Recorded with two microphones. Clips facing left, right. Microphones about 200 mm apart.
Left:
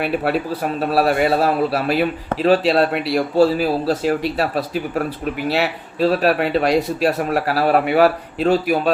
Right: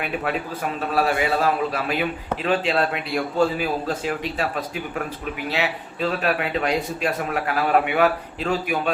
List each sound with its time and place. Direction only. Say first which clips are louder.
0.8 s a man's voice: left 5 dB; 45° left (ahead or behind)
6.0 s a man's voice: left 7 dB; 35° left (ahead or behind)